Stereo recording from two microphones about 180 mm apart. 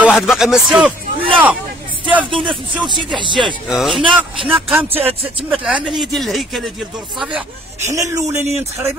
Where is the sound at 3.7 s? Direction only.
Centre (ahead or behind).